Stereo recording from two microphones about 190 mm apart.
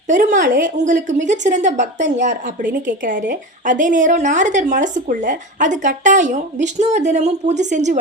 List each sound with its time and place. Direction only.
0.1 s a woman's voice: 45° right (ahead or behind)